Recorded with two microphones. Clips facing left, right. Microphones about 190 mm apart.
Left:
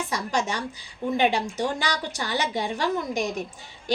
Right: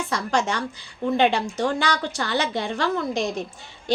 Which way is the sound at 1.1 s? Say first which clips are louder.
Right 2 dB; 15° left (ahead or behind).